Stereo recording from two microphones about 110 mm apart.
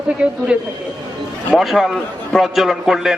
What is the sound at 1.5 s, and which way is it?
A man's voice, centre (ahead or behind).